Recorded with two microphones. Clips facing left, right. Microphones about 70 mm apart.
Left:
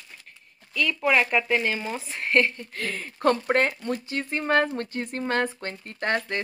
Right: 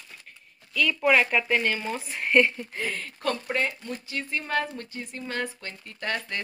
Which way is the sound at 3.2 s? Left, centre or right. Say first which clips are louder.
Left 7 dB; left.